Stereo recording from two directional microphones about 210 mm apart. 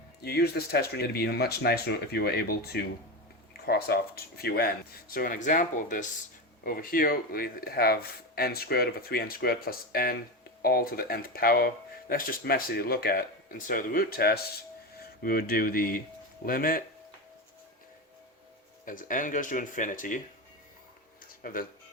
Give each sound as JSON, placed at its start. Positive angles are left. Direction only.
{"t": 0.2, "sound": "speech", "side_deg": 50}
{"t": 18.9, "sound": "speech", "side_deg": 40}
{"t": 21.4, "sound": "speech", "side_deg": 40}